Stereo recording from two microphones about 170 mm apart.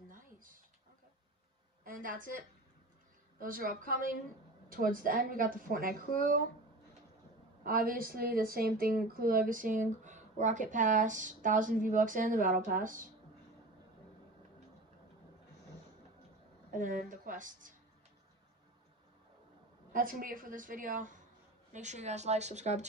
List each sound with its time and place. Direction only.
0.1 s a sound: 55° right (ahead or behind)
1.9 s a woman's voice: 55° right (ahead or behind)
3.3 s a woman's voice: 55° right (ahead or behind)
7.6 s a woman's voice: 55° right (ahead or behind)
16.7 s a woman's voice: 50° right (ahead or behind)
19.9 s a woman's voice: 55° right (ahead or behind)